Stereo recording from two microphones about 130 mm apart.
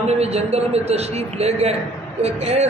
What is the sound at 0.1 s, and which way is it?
A man's voice, 55° right (ahead or behind).